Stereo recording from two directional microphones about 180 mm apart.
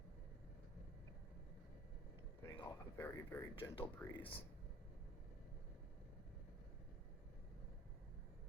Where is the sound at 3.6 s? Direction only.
30° left (ahead or behind).